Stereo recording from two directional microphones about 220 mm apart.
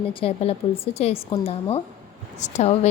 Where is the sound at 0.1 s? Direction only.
25° left (ahead or behind).